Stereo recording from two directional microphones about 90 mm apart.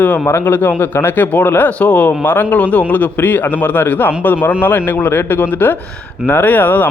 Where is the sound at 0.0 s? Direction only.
25° left (ahead or behind).